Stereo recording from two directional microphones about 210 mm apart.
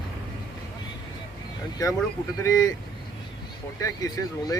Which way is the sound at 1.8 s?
15° left (ahead or behind).